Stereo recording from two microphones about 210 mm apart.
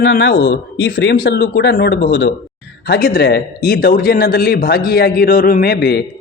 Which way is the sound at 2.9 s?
45° left (ahead or behind).